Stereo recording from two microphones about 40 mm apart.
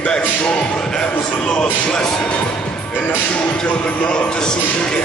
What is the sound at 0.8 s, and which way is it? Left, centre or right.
Speech, left.